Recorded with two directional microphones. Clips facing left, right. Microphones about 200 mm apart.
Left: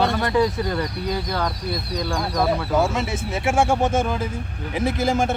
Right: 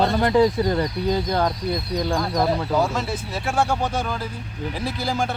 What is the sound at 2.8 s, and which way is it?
Speech, 20° left (ahead or behind).